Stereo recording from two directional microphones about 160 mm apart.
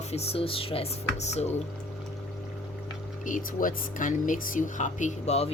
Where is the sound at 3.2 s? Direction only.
55° left (ahead or behind); by 5.5 s 40° left (ahead or behind).